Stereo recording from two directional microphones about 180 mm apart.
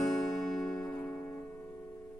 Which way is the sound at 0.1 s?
Centre (ahead or behind).